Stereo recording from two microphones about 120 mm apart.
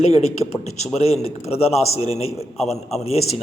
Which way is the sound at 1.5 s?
60° left (ahead or behind).